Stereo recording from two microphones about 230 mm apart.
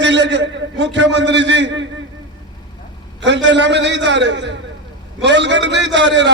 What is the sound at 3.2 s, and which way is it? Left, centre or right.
A man's voice, right.